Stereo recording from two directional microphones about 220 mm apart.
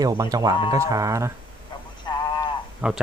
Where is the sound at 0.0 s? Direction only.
15° right (ahead or behind).